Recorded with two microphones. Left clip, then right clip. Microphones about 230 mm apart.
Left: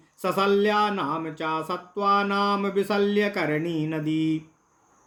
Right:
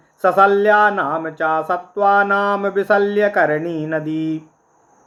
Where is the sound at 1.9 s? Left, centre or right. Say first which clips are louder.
Right 8 dB; left.